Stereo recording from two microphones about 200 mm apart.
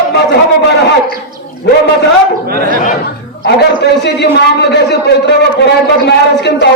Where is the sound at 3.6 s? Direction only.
60° left (ahead or behind).